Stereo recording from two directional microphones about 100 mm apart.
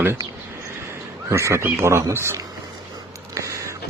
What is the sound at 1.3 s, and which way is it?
A man's voice, 30° right (ahead or behind).